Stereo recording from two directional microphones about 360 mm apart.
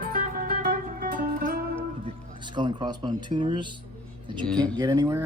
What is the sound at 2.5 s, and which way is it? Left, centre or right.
Speech, centre.